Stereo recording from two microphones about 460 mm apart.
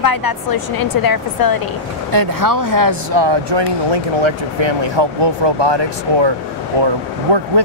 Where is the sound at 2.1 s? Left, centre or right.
Right.